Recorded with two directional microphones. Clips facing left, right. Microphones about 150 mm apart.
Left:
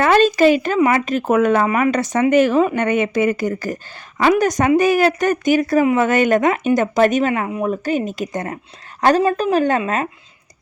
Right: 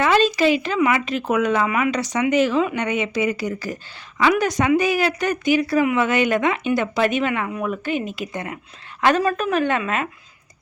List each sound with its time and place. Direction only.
0.0 s a woman's voice: 50° left (ahead or behind)